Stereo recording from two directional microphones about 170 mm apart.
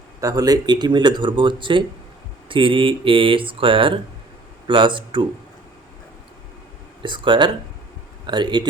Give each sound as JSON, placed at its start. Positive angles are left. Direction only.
{"t": 0.2, "sound": "speech", "side_deg": -20}
{"t": 7.0, "sound": "speech", "side_deg": -30}